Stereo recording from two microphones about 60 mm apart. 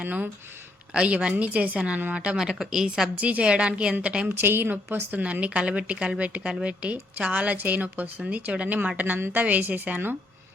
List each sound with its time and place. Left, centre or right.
0.0 s a woman's voice: right; by 3.1 s centre
3.2 s a woman's voice: right
4.3 s a woman's voice: right